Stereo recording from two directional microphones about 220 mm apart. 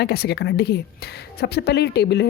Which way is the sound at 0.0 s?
50° left (ahead or behind).